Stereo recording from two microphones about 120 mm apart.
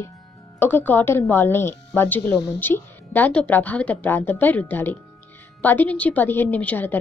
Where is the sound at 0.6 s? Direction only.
15° left (ahead or behind).